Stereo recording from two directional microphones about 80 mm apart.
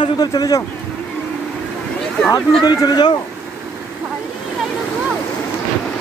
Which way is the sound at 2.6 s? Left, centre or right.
Left.